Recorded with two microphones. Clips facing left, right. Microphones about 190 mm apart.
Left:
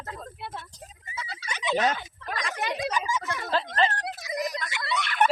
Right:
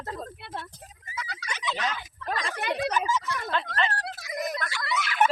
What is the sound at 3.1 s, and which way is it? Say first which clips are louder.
Speech: right 1 dB; 50° left (ahead or behind).